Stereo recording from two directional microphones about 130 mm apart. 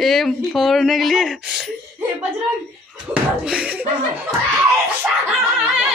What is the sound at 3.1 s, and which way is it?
Speech, 5° right (ahead or behind).